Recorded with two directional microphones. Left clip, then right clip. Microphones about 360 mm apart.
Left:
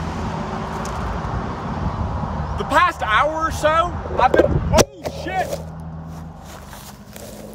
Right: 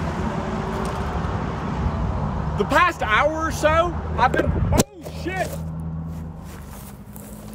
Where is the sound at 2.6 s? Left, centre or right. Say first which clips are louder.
Left 2 dB; centre.